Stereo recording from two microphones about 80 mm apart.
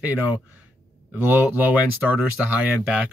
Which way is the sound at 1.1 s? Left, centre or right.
Right.